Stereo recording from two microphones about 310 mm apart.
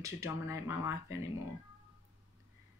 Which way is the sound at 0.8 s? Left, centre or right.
Left.